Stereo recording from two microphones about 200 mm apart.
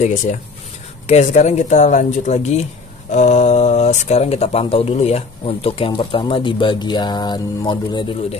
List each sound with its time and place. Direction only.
1.0 s speech: 35° left (ahead or behind)